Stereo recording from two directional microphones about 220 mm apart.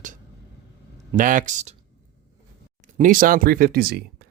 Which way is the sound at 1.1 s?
35° right (ahead or behind).